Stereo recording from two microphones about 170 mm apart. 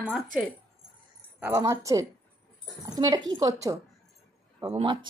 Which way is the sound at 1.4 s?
20° right (ahead or behind).